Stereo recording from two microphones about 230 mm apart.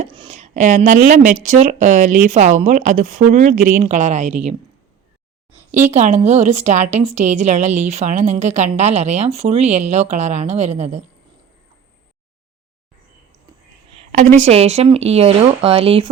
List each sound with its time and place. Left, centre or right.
0.0 s speech: right
5.9 s a woman's voice: right
14.1 s a woman's voice: right